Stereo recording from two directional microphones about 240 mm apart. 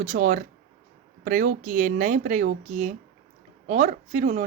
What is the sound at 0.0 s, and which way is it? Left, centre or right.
Speech, right.